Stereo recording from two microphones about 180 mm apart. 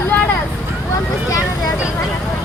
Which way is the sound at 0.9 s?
20° left (ahead or behind).